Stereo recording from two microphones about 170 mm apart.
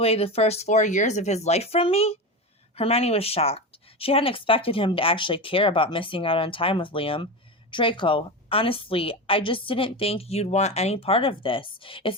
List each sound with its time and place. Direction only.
0.0 s speech: 35° left (ahead or behind)